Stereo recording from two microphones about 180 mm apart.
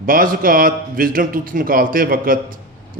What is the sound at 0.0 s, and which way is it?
Speech, 50° right (ahead or behind).